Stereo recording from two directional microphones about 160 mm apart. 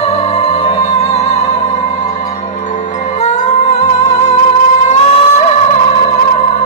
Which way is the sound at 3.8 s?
45° left (ahead or behind).